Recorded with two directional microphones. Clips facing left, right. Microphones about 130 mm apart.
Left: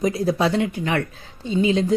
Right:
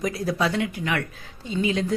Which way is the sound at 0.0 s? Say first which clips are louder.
Left 4 dB; 25° left (ahead or behind).